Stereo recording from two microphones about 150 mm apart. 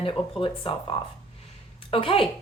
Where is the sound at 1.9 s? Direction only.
35° left (ahead or behind).